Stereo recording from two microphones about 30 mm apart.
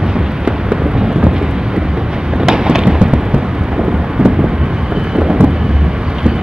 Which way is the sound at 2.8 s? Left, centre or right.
Right.